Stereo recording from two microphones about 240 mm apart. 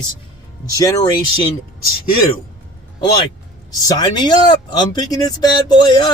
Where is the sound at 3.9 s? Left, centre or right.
Centre.